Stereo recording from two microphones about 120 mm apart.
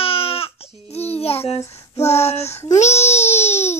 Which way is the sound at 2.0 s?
60° left (ahead or behind).